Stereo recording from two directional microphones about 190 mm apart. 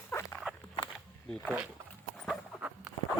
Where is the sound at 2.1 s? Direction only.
Centre (ahead or behind).